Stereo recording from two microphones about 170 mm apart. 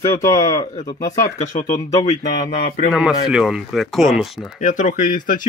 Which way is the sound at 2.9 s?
5° right (ahead or behind).